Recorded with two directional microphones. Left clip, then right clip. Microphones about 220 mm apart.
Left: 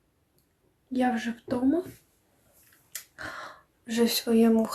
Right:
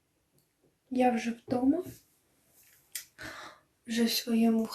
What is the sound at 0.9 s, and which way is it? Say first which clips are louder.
Speech: even; 30° left (ahead or behind).